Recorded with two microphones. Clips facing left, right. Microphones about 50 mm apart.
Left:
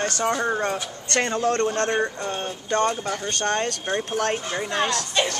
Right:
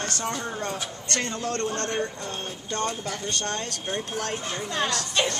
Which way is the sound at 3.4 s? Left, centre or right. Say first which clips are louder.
Left 7 dB; left.